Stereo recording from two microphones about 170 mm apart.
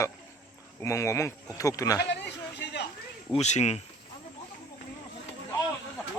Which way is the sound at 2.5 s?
85° left.